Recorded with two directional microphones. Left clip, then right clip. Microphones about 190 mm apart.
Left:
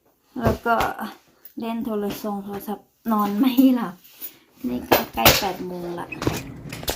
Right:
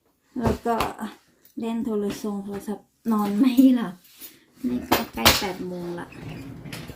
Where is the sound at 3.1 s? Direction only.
15° right (ahead or behind).